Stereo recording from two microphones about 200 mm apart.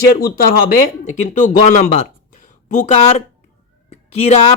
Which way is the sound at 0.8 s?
40° left (ahead or behind).